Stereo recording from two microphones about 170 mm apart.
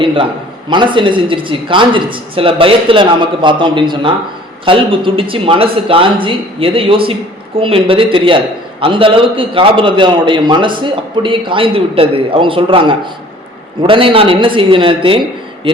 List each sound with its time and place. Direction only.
0.0 s a man's voice: 30° right (ahead or behind)